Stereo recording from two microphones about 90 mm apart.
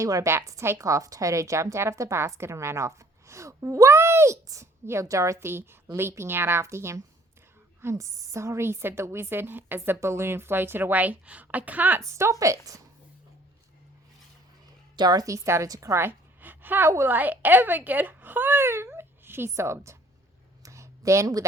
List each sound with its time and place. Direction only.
0.0 s a woman's voice: 40° right (ahead or behind); by 12.0 s 20° right (ahead or behind)
12.0 s a woman's voice: 35° right (ahead or behind)
14.9 s a woman's voice: 50° right (ahead or behind); by 20.0 s 35° right (ahead or behind)
20.6 s a sound: 35° right (ahead or behind)